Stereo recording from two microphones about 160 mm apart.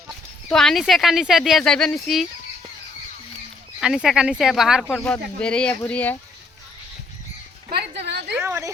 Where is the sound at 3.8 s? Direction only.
Centre (ahead or behind).